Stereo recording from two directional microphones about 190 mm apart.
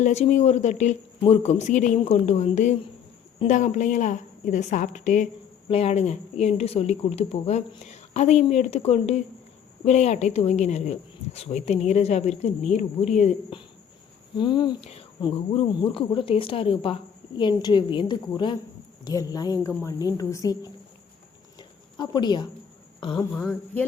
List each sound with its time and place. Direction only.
0.0 s a woman's voice: 40° left (ahead or behind)
14.3 s speech: 25° left (ahead or behind)
21.9 s speech: 20° left (ahead or behind)
23.3 s speech: 5° left (ahead or behind)